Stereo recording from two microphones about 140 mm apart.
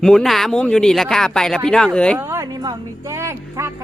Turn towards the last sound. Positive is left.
turn(degrees=-20)  # may be behind; listen again after turning